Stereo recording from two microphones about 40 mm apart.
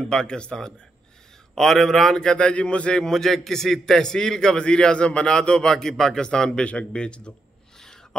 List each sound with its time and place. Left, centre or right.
0.1 s speech: left
1.5 s a man's voice: centre; by 3.0 s left
3.0 s a man's voice: centre
6.6 s speech: left
7.8 s a sound: centre